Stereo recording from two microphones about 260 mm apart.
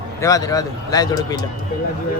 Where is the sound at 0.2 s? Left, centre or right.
Centre.